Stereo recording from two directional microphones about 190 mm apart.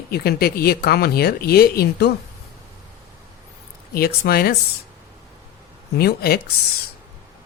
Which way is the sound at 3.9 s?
55° left (ahead or behind).